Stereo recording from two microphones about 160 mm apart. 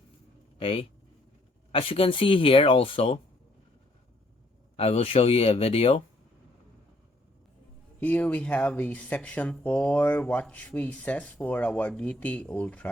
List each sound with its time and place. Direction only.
0.6 s speech: 35° left (ahead or behind)
4.8 s speech: 40° left (ahead or behind)
8.0 s speech: 10° left (ahead or behind)